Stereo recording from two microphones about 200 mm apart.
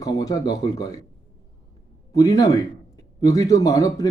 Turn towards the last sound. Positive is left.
turn(degrees=15)  # may be behind; listen again after turning